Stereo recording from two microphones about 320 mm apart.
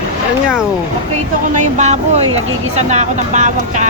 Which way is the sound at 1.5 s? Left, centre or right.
Right.